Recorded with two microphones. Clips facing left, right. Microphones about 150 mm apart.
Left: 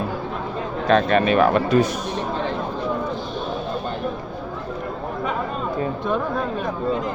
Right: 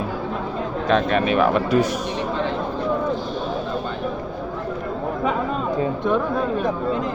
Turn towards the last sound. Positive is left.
turn(degrees=-20)  # may be behind; listen again after turning